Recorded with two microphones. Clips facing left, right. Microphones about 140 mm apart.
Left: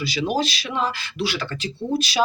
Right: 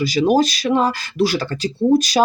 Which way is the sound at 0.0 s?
45° right (ahead or behind).